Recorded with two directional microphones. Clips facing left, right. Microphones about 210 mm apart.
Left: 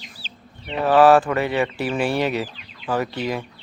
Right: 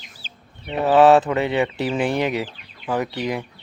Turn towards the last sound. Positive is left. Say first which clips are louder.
# even
turn(degrees=-15)  # may be behind; listen again after turning